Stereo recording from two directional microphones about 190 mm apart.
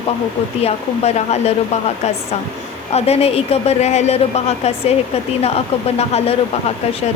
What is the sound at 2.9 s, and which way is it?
Speech, 35° left (ahead or behind).